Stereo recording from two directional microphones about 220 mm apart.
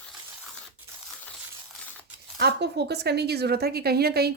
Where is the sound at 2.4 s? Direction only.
50° right (ahead or behind).